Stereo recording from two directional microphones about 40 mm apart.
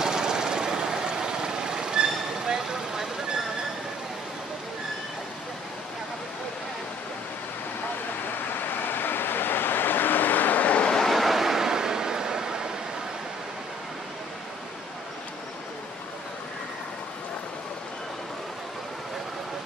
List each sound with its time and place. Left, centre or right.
0.0 s vehicle: centre
8.3 s vehicle: left
11.1 s a sound: centre